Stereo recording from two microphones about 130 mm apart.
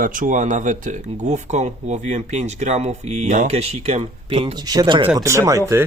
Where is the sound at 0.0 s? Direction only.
90° right; by 4.5 s 55° right (ahead or behind).